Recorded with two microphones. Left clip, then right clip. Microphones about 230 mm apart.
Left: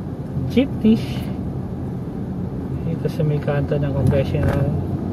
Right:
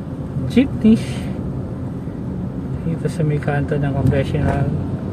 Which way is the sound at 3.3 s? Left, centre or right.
Centre.